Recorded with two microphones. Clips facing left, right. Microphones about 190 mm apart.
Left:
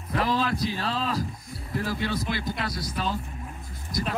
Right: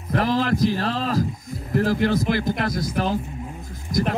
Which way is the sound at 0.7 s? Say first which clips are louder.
Right 5 dB; 45° right (ahead or behind).